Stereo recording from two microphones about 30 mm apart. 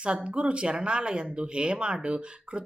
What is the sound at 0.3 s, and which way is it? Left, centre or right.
Speech, right.